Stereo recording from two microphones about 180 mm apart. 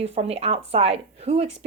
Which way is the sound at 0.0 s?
35° right (ahead or behind).